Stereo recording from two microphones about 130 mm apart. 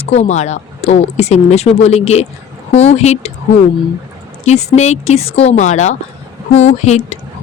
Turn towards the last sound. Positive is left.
turn(degrees=60)  # may be behind; listen again after turning